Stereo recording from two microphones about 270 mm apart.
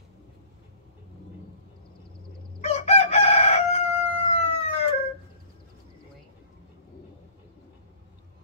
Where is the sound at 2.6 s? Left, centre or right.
Left.